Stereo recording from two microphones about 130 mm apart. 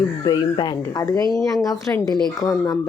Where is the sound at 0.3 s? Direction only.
35° left (ahead or behind).